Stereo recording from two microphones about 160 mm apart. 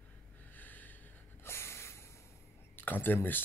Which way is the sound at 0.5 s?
10° left (ahead or behind).